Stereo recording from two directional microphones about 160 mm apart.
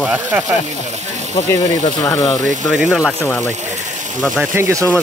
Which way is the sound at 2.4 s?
50° right (ahead or behind).